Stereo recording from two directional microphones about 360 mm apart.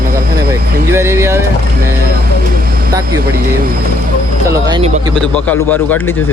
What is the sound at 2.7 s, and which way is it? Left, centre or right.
Vehicle, right.